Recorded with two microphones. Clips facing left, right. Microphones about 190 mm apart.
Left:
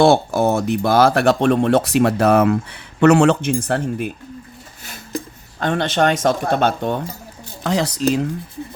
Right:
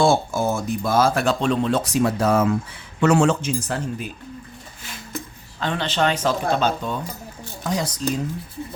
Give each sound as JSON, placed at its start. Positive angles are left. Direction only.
{"t": 0.0, "sound": "speech", "side_deg": 65}
{"t": 5.5, "sound": "speech", "side_deg": 50}
{"t": 7.6, "sound": "speech", "side_deg": 70}